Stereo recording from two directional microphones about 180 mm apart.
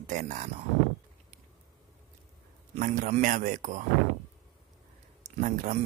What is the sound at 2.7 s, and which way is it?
Speech, 45° right (ahead or behind).